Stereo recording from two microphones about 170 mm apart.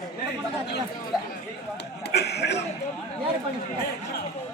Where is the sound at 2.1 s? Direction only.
75° left (ahead or behind).